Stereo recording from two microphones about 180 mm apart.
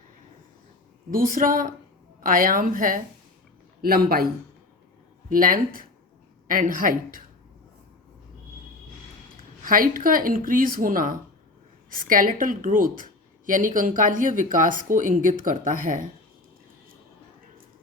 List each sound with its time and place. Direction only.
1.1 s a man's voice: 50° right (ahead or behind)
5.3 s speech: 50° right (ahead or behind)
9.6 s speech: 50° right (ahead or behind)